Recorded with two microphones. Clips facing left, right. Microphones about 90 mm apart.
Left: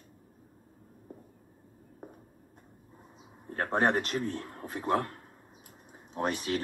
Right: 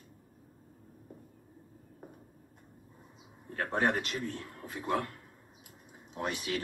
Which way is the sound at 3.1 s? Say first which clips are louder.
Left 3 dB; 35° left (ahead or behind).